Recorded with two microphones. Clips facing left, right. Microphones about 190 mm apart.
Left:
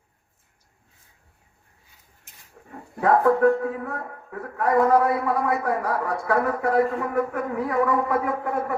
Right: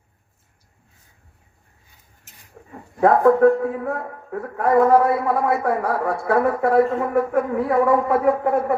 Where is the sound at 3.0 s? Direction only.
35° right (ahead or behind).